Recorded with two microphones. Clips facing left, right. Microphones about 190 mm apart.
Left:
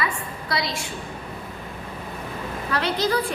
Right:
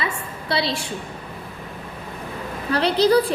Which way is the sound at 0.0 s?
30° right (ahead or behind).